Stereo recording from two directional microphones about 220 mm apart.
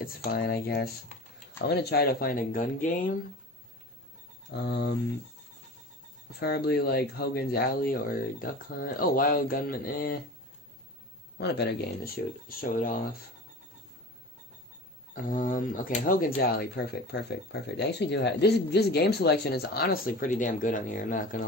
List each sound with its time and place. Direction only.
0.0 s speech: 45° left (ahead or behind)
4.5 s speech: 50° left (ahead or behind)
6.4 s speech: 45° left (ahead or behind)
11.3 s speech: 50° left (ahead or behind)
15.1 s speech: 40° left (ahead or behind)